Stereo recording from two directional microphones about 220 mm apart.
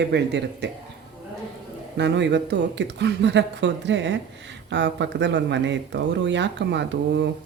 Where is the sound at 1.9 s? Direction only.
50° right (ahead or behind).